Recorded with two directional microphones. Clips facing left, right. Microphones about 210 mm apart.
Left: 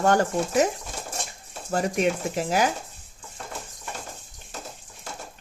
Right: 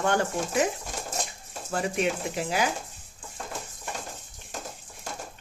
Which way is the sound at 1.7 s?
40° left (ahead or behind).